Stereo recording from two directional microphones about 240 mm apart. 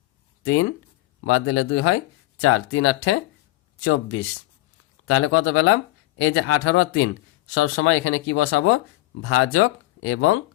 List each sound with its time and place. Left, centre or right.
0.4 s speech: left